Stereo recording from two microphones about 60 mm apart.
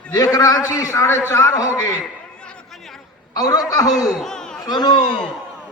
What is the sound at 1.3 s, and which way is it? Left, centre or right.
Speech, left.